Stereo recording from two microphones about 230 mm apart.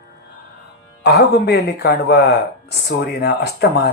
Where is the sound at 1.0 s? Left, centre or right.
Left.